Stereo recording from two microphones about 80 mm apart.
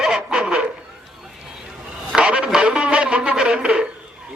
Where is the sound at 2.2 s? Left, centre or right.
Centre.